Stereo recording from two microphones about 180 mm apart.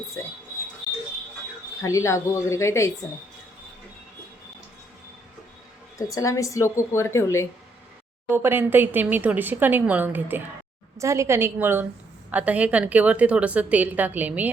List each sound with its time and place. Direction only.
1.8 s a woman's voice: 15° left (ahead or behind)
6.0 s a woman's voice: 20° left (ahead or behind)
8.3 s a woman's voice: 10° right (ahead or behind)